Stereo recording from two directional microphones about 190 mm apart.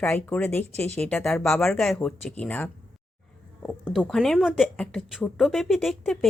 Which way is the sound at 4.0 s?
5° left (ahead or behind).